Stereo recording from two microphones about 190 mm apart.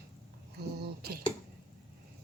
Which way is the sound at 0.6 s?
60° right (ahead or behind).